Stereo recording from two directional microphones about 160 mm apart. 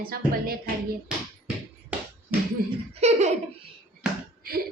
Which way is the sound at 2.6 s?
65° right (ahead or behind).